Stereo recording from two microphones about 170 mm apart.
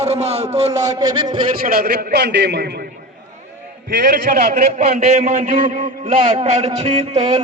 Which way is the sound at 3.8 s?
75° right (ahead or behind).